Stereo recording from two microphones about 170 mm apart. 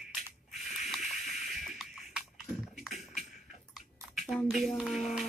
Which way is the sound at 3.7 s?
Centre (ahead or behind).